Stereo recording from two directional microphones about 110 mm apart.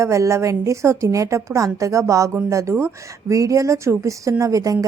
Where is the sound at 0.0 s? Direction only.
30° right (ahead or behind).